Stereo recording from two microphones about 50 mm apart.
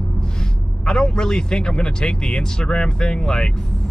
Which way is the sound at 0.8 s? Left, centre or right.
Centre.